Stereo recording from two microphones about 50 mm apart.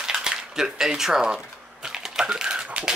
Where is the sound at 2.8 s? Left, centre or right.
Right.